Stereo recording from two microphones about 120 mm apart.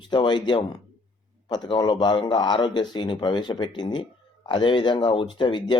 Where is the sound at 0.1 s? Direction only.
40° left (ahead or behind).